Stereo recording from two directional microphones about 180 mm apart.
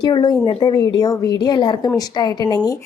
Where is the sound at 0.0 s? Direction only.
20° left (ahead or behind).